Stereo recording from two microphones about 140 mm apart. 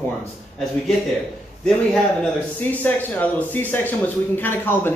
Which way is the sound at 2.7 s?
10° left (ahead or behind).